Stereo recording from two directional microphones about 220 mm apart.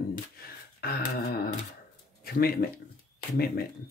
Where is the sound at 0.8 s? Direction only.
45° left (ahead or behind).